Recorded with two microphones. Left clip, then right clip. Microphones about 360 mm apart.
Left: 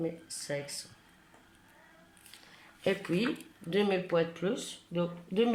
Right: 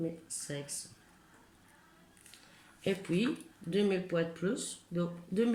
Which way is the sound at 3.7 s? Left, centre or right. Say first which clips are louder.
Left 3 dB; centre.